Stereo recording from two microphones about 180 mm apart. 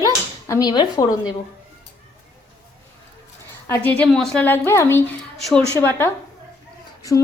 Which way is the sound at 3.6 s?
10° left (ahead or behind).